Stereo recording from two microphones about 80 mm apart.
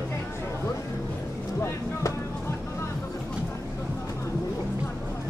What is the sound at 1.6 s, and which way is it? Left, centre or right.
Music, left.